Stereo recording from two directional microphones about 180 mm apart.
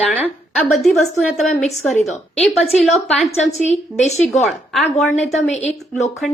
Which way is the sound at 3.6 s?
40° left (ahead or behind).